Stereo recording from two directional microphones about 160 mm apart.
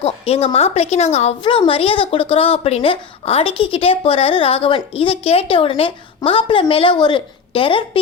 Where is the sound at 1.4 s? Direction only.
30° left (ahead or behind).